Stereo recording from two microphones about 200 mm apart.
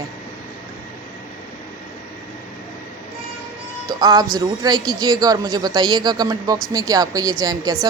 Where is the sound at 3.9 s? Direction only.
20° right (ahead or behind).